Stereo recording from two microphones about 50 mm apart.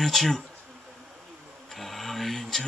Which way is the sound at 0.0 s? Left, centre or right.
Centre.